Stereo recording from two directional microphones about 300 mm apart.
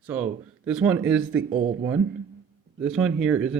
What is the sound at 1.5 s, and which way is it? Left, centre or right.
Speech, centre.